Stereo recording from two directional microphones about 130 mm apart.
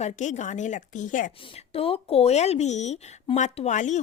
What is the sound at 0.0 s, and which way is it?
Speech, 70° left (ahead or behind).